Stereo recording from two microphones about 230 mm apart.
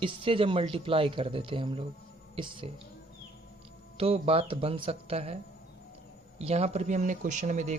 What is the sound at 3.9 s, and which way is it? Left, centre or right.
Speech, right.